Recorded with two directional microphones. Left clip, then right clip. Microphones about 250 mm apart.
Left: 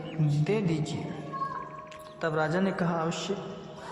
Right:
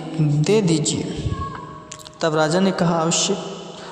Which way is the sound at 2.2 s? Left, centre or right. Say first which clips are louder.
Right 10 dB; right.